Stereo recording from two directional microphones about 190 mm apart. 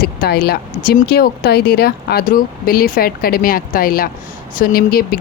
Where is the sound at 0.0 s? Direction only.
55° left (ahead or behind).